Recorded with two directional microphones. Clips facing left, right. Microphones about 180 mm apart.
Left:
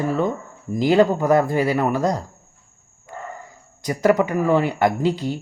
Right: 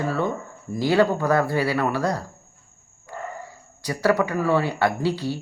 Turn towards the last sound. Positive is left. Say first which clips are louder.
# left 3 dB
turn(degrees=20)  # may be behind; listen again after turning